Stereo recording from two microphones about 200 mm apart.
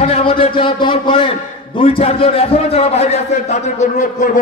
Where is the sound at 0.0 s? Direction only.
30° left (ahead or behind).